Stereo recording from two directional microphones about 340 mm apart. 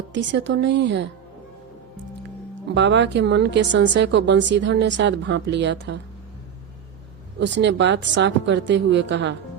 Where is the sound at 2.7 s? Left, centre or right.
Right.